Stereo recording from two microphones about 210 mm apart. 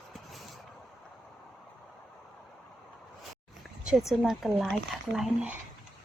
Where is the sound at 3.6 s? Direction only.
5° right (ahead or behind).